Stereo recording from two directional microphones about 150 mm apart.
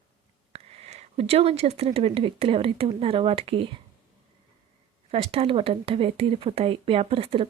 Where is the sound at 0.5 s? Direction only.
45° right (ahead or behind).